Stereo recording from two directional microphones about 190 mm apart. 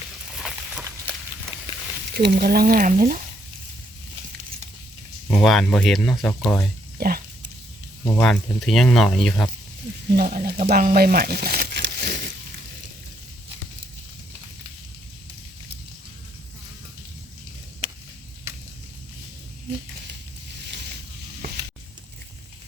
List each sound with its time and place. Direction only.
0.3 s a sound: centre (ahead or behind)
2.1 s speech: 55° right (ahead or behind)
5.4 s speech: centre (ahead or behind)
7.0 s speech: 55° right (ahead or behind)
8.2 s speech: centre (ahead or behind)
10.2 s speech: 50° right (ahead or behind)